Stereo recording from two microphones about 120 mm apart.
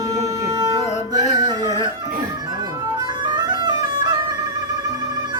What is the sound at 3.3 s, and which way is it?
Music, 35° right (ahead or behind).